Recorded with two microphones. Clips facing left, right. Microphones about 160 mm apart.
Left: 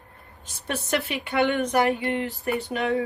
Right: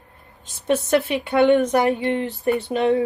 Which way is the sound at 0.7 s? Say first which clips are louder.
Right 8 dB; 20° right (ahead or behind).